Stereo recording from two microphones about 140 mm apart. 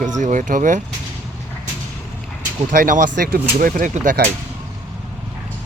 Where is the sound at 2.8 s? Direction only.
90° right; by 4.2 s 65° right (ahead or behind).